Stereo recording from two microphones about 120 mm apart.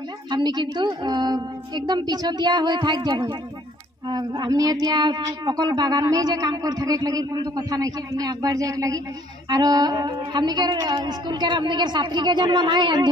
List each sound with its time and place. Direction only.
0.3 s speech: 35° right (ahead or behind)